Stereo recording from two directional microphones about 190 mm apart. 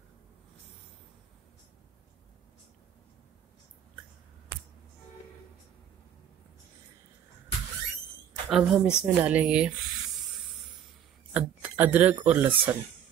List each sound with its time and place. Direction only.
8.5 s a woman's voice: centre (ahead or behind)
11.3 s speech: 10° right (ahead or behind)